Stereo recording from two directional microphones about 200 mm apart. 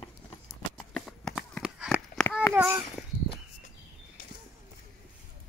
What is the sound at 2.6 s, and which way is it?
Babbling, 10° right (ahead or behind).